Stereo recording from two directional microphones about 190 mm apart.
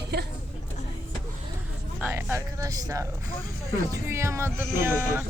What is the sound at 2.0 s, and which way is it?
Speech, 15° right (ahead or behind).